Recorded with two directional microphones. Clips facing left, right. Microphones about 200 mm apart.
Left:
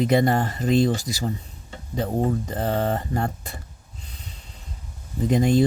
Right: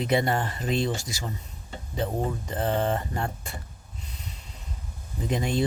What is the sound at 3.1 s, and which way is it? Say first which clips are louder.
Speech: left 5 dB; 40° left (ahead or behind).